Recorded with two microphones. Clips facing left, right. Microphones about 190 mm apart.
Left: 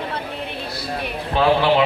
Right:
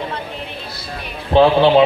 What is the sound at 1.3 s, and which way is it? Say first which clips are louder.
Speech: right 9 dB; 30° right (ahead or behind).